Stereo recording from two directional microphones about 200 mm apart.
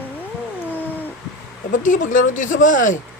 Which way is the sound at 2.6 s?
40° left (ahead or behind).